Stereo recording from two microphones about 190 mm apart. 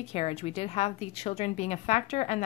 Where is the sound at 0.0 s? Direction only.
30° left (ahead or behind).